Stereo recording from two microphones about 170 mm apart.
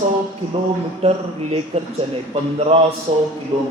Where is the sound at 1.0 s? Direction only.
35° right (ahead or behind).